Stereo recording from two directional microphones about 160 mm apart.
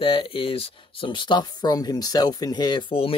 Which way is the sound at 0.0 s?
30° left (ahead or behind).